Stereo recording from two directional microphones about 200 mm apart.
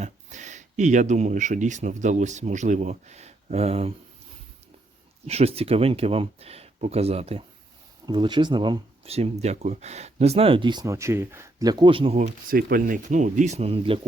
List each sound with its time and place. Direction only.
0.0 s speech: 35° right (ahead or behind)
5.2 s speech: 30° right (ahead or behind)
12.5 s speech: 50° right (ahead or behind); by 14.0 s 30° right (ahead or behind)